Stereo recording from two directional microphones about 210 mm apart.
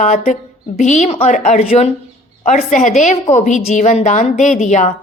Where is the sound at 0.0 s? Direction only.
35° left (ahead or behind).